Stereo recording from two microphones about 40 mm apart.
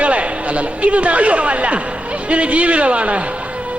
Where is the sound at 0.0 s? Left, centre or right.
Right.